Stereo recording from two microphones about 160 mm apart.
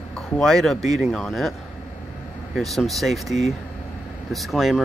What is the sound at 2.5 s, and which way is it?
Speech, centre (ahead or behind).